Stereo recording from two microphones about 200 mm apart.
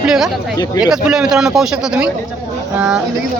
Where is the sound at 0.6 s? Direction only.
20° left (ahead or behind).